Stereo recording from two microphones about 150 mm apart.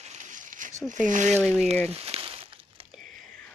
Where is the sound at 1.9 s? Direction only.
40° right (ahead or behind).